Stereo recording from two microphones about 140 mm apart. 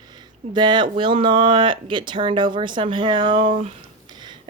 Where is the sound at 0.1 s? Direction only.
30° right (ahead or behind).